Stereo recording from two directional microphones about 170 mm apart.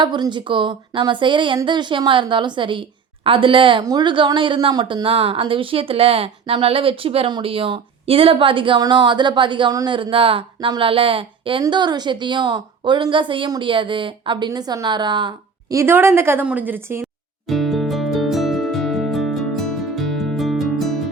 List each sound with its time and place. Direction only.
0.0 s a woman's voice: 25° right (ahead or behind)
17.4 s music: centre (ahead or behind)